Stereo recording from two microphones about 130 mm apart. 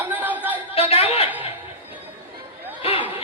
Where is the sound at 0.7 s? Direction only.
50° left (ahead or behind).